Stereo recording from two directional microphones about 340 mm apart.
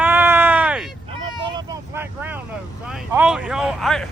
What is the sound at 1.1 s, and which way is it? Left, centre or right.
Vehicle, centre.